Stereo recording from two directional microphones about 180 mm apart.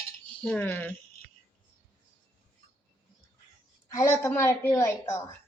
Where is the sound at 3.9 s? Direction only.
15° left (ahead or behind).